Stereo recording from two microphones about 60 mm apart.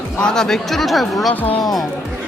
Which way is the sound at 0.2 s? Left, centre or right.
Centre.